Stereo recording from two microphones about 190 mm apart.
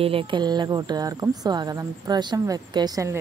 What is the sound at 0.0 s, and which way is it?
Speech, 30° right (ahead or behind).